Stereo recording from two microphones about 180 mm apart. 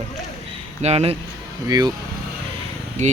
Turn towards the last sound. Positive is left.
turn(degrees=-40)  # may be behind; listen again after turning